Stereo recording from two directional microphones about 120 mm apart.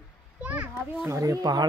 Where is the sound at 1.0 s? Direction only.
25° right (ahead or behind).